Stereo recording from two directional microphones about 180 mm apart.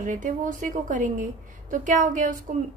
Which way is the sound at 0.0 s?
45° right (ahead or behind).